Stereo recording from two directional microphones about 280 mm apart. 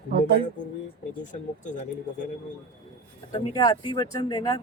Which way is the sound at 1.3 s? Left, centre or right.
Left.